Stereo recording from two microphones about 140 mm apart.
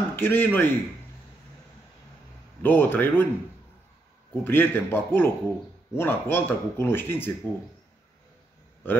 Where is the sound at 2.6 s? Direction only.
15° left (ahead or behind).